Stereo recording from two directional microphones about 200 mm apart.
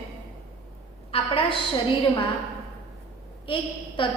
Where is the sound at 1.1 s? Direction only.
25° left (ahead or behind).